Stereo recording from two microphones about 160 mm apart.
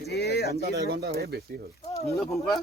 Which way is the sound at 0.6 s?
90° right.